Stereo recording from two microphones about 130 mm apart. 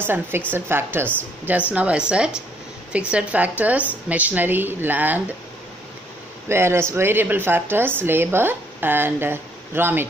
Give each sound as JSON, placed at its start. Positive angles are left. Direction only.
{"t": 0.0, "sound": "speech", "side_deg": -15}
{"t": 6.5, "sound": "speech", "side_deg": -20}